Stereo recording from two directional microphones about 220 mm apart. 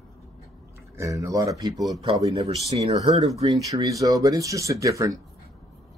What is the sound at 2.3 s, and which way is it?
Speech, 30° right (ahead or behind).